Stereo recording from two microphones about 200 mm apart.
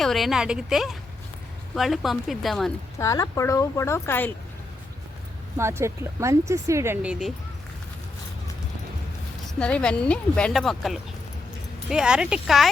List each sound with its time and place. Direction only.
0.0 s a woman's voice: centre (ahead or behind)
3.0 s speech: 15° left (ahead or behind)
5.5 s speech: 15° right (ahead or behind)
9.6 s a woman's voice: 5° left (ahead or behind)